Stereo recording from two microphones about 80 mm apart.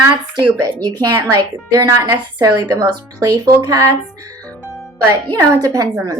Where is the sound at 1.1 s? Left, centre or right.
Right.